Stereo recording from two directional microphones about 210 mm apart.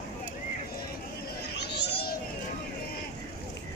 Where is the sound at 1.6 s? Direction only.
55° left (ahead or behind).